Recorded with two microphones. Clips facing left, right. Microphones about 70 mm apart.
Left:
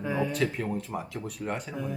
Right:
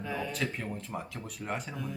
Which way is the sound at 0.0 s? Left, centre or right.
Centre.